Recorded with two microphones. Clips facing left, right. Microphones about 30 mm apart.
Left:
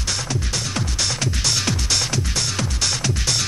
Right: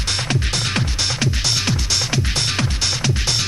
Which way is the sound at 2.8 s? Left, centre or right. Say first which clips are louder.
Right 2 dB; centre.